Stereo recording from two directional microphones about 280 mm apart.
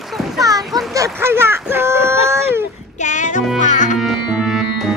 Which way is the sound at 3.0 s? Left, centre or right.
Left.